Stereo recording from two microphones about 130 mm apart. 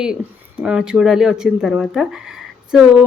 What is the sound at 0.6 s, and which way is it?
A woman's voice, 5° right (ahead or behind).